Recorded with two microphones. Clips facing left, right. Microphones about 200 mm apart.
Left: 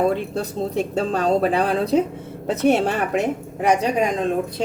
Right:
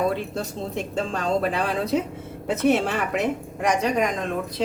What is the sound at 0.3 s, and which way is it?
A man's voice, 35° left (ahead or behind).